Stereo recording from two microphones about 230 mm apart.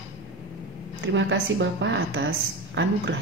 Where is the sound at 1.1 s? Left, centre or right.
Right.